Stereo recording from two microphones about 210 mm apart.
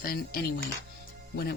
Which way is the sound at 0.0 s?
45° left (ahead or behind).